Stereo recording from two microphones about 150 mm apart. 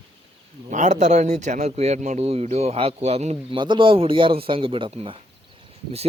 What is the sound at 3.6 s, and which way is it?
A man's voice, 35° right (ahead or behind).